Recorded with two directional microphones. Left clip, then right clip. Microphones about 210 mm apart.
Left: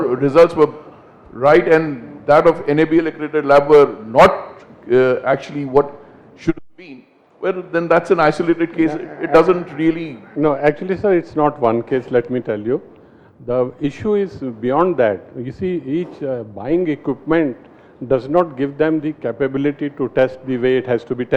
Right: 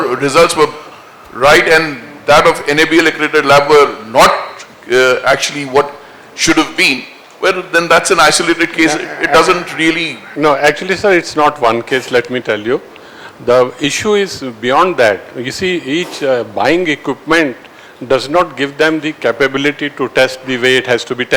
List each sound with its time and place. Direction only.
0.0 s a man's voice: 5° right (ahead or behind)
4.3 s dog: 5° right (ahead or behind)
5.2 s a man's voice: 10° right (ahead or behind)
11.4 s a man's voice: 20° right (ahead or behind)
11.7 s a man's voice: 5° right (ahead or behind)